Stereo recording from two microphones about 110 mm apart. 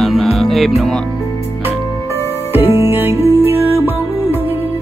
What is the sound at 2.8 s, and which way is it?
Music, 20° right (ahead or behind).